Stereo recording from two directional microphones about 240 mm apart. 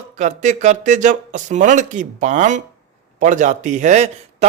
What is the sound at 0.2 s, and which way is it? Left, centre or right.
Speech, right.